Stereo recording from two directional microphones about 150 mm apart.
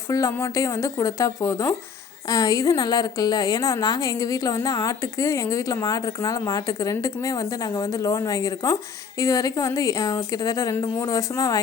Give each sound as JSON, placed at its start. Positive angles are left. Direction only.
{"t": 0.1, "sound": "a woman's voice", "side_deg": 20}